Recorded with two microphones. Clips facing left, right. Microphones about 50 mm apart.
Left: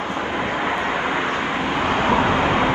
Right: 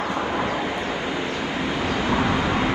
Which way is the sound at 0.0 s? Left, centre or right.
Left.